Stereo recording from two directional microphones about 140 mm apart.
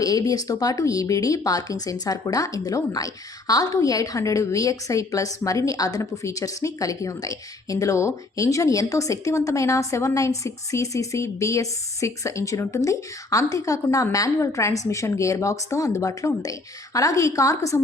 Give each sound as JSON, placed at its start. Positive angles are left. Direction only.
{"t": 0.0, "sound": "speech", "side_deg": 25}